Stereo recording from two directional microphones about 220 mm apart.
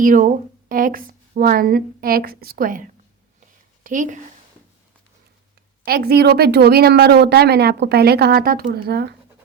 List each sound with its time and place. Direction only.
0.0 s a woman's voice: 35° right (ahead or behind)
5.8 s a woman's voice: 45° right (ahead or behind)